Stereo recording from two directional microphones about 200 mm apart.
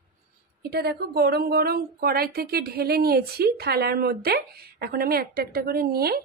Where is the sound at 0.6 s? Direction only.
50° right (ahead or behind).